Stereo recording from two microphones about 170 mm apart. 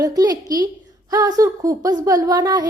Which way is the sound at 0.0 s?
20° right (ahead or behind).